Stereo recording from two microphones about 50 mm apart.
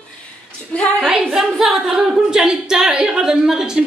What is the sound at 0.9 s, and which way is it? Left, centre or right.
Speech, centre.